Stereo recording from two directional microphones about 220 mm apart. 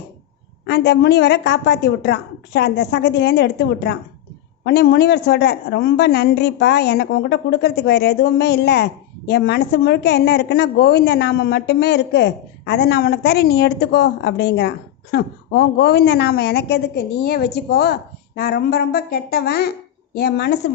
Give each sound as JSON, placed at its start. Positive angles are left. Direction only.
{"t": 0.7, "sound": "a woman's voice", "side_deg": 50}